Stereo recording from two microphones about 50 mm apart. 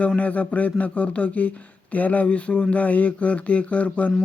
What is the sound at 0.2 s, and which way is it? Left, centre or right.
Speech, left.